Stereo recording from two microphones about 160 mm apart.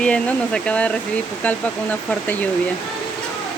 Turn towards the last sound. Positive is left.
turn(degrees=10)  # may be behind; listen again after turning